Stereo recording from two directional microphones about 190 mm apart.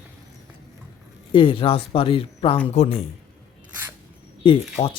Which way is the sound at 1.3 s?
25° left (ahead or behind).